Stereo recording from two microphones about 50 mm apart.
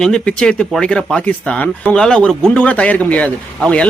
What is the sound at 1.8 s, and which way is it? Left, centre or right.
Speech, centre.